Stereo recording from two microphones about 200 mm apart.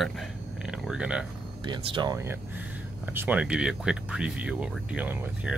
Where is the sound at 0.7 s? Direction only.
5° right (ahead or behind).